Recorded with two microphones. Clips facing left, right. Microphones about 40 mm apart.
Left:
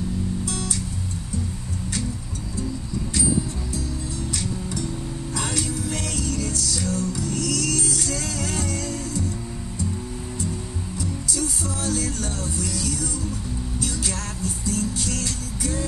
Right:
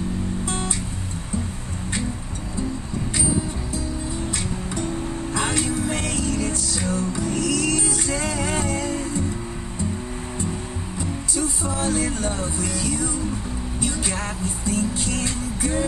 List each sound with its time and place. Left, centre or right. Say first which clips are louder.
0.5 s music: right 2 dB; right
4.7 s music: right 3 dB; right
11.0 s music: right 2 dB; right